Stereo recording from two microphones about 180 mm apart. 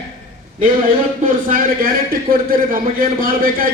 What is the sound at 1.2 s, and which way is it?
A man's voice, 50° right (ahead or behind).